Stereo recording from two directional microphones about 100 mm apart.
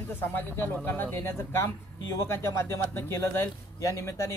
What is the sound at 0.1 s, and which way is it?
Speech, 20° left (ahead or behind).